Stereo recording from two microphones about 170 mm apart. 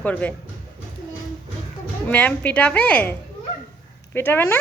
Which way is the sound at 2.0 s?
10° left (ahead or behind).